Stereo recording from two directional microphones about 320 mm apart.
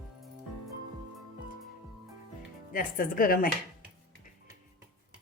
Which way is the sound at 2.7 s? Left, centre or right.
Left.